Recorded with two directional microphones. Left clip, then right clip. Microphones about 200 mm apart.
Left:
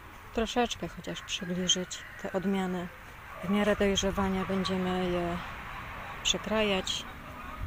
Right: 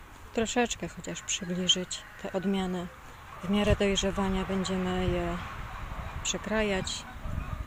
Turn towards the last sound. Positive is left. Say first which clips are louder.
# left 1 dB
turn(degrees=-5)  # may be behind; listen again after turning